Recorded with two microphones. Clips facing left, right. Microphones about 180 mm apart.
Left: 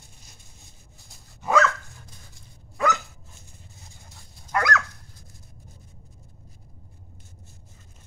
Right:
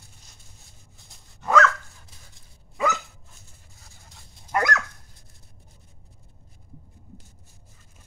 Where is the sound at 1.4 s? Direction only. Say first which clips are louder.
Right 1 dB; 10° left (ahead or behind).